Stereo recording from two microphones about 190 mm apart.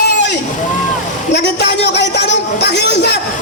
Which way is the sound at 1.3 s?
60° left (ahead or behind).